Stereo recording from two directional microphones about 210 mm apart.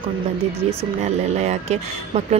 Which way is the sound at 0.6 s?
30° right (ahead or behind).